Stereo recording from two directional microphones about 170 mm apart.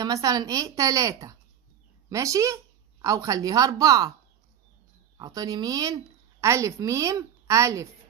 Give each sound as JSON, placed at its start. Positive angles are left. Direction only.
{"t": 0.0, "sound": "a woman's voice", "side_deg": -20}
{"t": 5.1, "sound": "a woman's voice", "side_deg": -20}